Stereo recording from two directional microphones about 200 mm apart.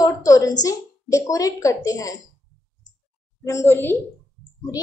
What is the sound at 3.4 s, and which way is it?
Speech, 10° left (ahead or behind).